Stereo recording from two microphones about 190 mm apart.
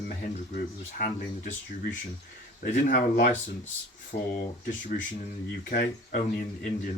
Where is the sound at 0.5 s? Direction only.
45° left (ahead or behind).